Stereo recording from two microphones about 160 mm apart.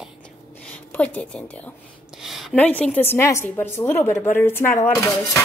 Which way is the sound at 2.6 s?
10° left (ahead or behind).